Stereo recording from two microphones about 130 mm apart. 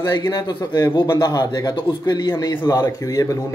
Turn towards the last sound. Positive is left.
turn(degrees=25)  # may be behind; listen again after turning